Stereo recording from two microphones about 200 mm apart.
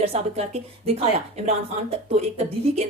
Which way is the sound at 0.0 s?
30° right (ahead or behind).